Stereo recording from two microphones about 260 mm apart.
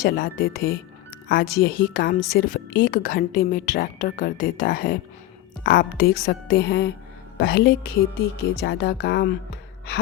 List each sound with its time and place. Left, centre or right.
0.0 s a woman's voice: left